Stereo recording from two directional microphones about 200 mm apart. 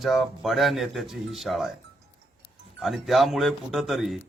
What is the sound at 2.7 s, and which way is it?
Speech, centre (ahead or behind).